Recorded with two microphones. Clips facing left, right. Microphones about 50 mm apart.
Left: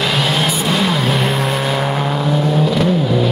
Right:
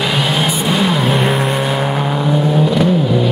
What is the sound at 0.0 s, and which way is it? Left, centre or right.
Vehicle, centre.